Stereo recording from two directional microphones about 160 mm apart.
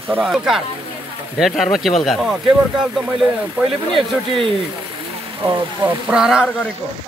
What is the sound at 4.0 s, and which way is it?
Speech, 35° right (ahead or behind).